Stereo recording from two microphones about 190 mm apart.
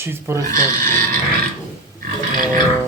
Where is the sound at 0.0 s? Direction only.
15° right (ahead or behind).